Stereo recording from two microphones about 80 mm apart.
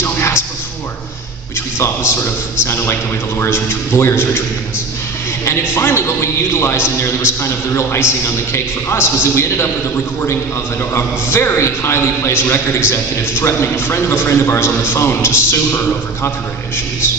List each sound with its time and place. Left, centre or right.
0.0 s a sound: left
2.6 s a man's voice: left
5.4 s a man's voice: left
11.0 s a man's voice: left